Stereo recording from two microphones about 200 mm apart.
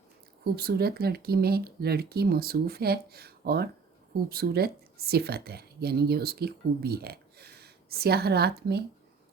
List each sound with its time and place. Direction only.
0.4 s speech: 50° right (ahead or behind)